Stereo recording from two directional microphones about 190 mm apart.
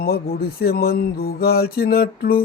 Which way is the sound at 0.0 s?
50° left (ahead or behind).